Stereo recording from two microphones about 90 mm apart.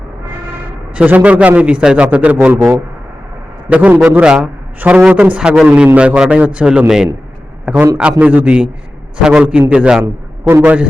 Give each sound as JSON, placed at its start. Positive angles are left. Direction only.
{"t": 0.9, "sound": "a man's voice", "side_deg": -15}
{"t": 3.7, "sound": "a man's voice", "side_deg": -15}